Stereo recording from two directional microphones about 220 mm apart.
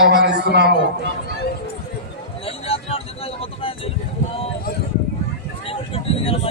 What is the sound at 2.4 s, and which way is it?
Vehicle, 25° left (ahead or behind).